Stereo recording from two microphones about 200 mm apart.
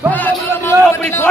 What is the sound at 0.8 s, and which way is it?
Speech, 5° left (ahead or behind).